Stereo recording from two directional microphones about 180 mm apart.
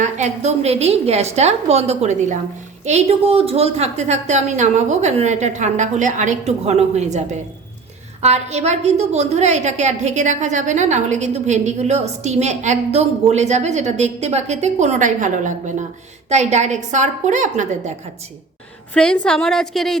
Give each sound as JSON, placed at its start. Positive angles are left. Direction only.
{"t": 0.0, "sound": "a woman's voice", "side_deg": -40}
{"t": 18.9, "sound": "a woman's voice", "side_deg": 5}